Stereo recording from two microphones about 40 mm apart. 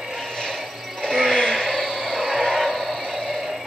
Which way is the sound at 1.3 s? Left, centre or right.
Centre.